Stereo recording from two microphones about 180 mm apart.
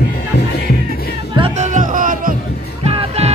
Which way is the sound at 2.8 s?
35° right (ahead or behind).